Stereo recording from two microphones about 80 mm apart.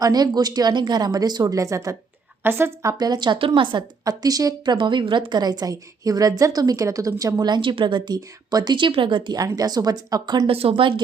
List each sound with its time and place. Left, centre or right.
0.0 s speech: right
1.5 s a woman's voice: right
2.4 s a woman's voice: right
3.0 s a woman's voice: right
4.0 s a woman's voice: right
4.6 s a woman's voice: right
7.5 s speech: right
9.3 s speech: right